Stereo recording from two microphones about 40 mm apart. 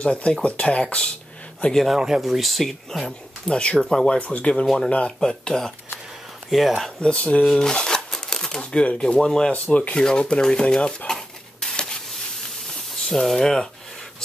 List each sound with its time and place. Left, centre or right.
0.0 s speech: left
1.6 s speech: left
2.0 s speech: centre
3.4 s speech: left
4.2 s speech: left
6.5 s speech: centre
7.0 s speech: left
7.5 s shuffling cards: centre
8.8 s speech: left
9.5 s speech: left
9.9 s speech: left
11.1 s a sound: centre
13.0 s speech: centre